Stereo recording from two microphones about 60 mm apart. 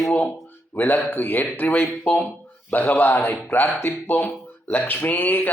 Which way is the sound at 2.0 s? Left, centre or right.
Left.